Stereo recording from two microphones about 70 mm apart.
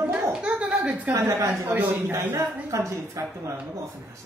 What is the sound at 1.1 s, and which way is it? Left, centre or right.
A woman's voice, right.